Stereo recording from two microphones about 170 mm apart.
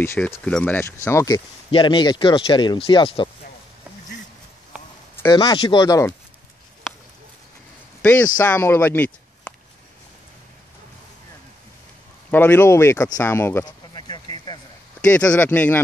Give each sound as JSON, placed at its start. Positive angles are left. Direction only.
{"t": 0.0, "sound": "speech", "side_deg": 15}
{"t": 5.1, "sound": "speech", "side_deg": 20}
{"t": 8.4, "sound": "speech", "side_deg": 10}
{"t": 12.3, "sound": "speech", "side_deg": 10}
{"t": 13.7, "sound": "a sound", "side_deg": 25}
{"t": 15.1, "sound": "speech", "side_deg": 10}